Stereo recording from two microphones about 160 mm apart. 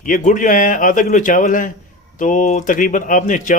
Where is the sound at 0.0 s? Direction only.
55° left (ahead or behind).